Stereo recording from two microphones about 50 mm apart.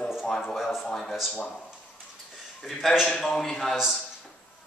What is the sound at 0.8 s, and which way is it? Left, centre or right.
Speech, centre.